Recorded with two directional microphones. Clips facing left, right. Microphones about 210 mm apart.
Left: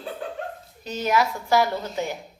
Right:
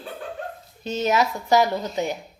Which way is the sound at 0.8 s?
25° right (ahead or behind).